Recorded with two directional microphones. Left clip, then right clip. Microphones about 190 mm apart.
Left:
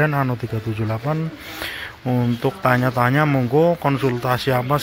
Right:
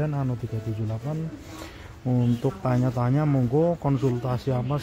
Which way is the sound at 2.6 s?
10° left (ahead or behind).